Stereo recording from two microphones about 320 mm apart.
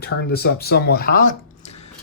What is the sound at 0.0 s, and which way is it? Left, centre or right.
Speech, left.